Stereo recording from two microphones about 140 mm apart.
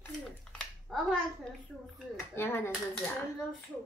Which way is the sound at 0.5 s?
5° left (ahead or behind).